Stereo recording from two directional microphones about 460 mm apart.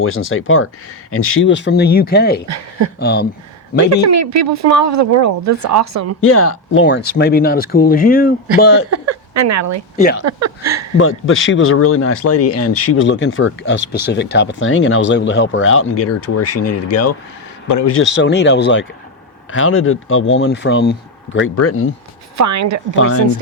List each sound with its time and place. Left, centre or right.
0.0 s speech: left
4.1 s speech: right
6.2 s speech: left
8.9 s speech: right
10.0 s speech: left
10.4 s speech: right
10.9 s speech: left
22.4 s speech: right